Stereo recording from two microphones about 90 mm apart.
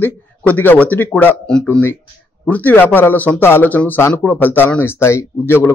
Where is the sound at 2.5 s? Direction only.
20° left (ahead or behind).